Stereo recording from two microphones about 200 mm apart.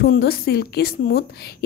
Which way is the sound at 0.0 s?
55° left (ahead or behind).